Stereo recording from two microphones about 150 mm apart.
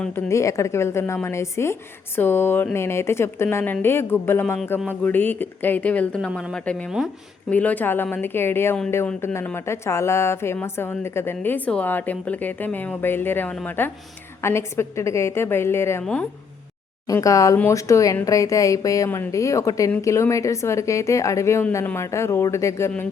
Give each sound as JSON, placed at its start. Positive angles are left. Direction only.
{"t": 0.3, "sound": "a woman's voice", "side_deg": 20}
{"t": 17.1, "sound": "speech", "side_deg": 20}